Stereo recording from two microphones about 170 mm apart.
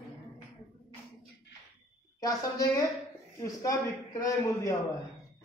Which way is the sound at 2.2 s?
20° left (ahead or behind).